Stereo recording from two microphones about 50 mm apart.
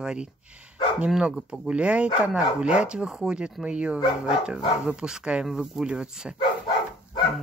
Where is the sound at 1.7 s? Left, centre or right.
Right.